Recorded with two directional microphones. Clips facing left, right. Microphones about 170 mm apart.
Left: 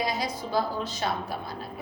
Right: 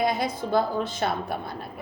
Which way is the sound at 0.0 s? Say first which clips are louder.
Right 4 dB; 55° right (ahead or behind).